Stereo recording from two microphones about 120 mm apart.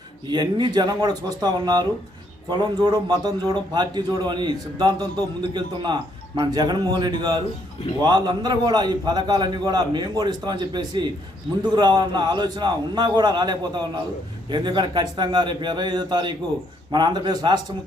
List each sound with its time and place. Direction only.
0.3 s a man's voice: 40° right (ahead or behind)